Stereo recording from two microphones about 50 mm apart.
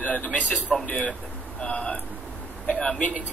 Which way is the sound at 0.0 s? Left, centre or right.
Left.